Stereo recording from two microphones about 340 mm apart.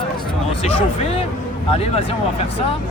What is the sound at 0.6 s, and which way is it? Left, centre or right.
Speech, centre.